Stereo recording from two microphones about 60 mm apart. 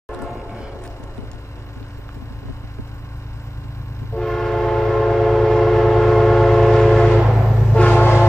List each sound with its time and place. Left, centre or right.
4.1 s train: centre
7.2 s train: centre
7.7 s train: centre